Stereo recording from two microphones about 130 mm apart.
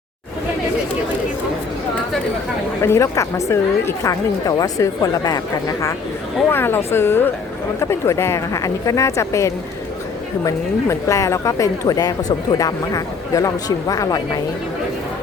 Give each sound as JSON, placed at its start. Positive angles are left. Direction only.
{"t": 2.8, "sound": "speech", "side_deg": 20}
{"t": 6.5, "sound": "speech", "side_deg": 15}